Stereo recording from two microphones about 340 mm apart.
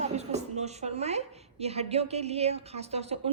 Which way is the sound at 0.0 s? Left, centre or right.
Centre.